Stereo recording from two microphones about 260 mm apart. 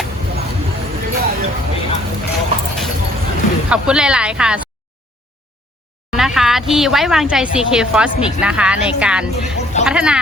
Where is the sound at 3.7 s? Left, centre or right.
Centre.